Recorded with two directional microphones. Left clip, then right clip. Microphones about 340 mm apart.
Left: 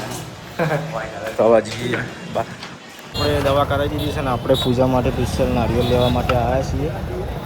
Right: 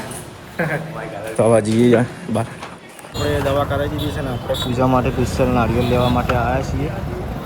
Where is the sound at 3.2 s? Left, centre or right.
Centre.